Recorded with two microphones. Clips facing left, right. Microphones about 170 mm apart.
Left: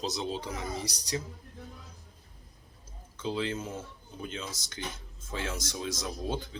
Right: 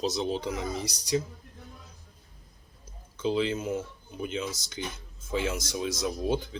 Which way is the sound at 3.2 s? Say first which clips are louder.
Right 5 dB; 20° right (ahead or behind).